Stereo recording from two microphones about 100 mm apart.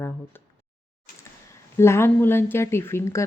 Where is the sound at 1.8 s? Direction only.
25° left (ahead or behind).